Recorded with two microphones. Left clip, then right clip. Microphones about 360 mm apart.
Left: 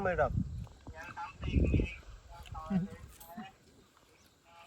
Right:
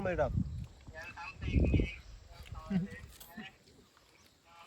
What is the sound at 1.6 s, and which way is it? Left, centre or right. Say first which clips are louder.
Speech: even; centre.